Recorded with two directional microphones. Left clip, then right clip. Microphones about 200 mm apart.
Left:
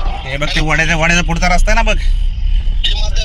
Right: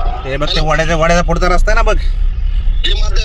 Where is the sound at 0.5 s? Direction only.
10° right (ahead or behind); by 2.0 s 25° right (ahead or behind).